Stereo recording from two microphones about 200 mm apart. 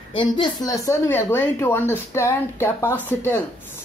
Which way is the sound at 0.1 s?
25° left (ahead or behind).